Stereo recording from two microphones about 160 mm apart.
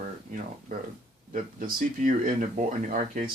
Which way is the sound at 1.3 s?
60° right (ahead or behind).